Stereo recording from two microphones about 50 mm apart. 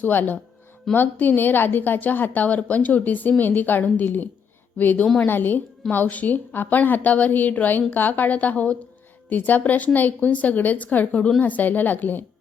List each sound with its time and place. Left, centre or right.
0.0 s a woman's voice: left